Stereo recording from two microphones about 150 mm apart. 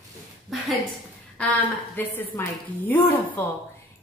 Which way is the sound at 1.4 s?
10° left (ahead or behind).